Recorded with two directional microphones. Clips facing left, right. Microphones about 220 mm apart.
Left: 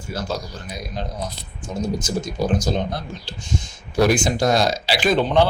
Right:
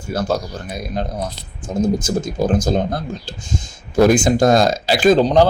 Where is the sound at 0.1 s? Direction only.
55° right (ahead or behind).